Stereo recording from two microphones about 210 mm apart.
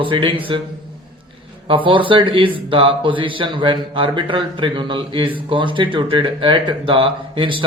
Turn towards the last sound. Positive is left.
turn(degrees=-25)  # may be behind; listen again after turning